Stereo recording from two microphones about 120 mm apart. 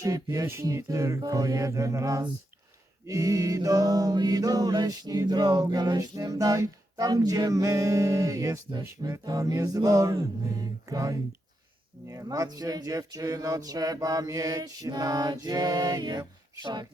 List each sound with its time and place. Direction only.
0.0 s music: 30° right (ahead or behind)
13.7 s mantra: 30° right (ahead or behind)